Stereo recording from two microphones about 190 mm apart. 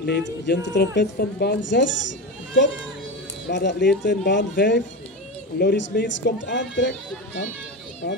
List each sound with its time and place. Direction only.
0.0 s speech: 60° left (ahead or behind)